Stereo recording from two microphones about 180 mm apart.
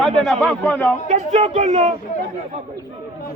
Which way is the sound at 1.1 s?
35° right (ahead or behind).